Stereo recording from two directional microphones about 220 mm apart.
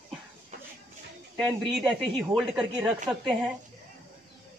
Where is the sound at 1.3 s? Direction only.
Centre (ahead or behind).